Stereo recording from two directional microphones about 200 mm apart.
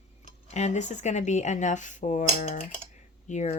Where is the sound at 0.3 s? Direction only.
35° left (ahead or behind).